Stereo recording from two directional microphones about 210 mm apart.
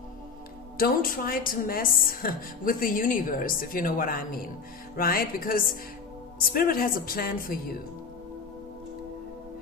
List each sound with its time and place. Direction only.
0.7 s a woman's voice: 45° left (ahead or behind)